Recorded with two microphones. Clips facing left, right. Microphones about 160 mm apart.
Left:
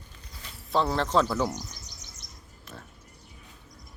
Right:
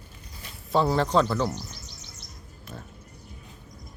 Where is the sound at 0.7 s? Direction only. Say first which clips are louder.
Right 3 dB; centre (ahead or behind); by 1.9 s 15° left (ahead or behind).